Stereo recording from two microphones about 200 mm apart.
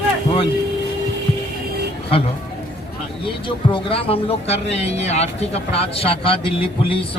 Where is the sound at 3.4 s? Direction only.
25° left (ahead or behind).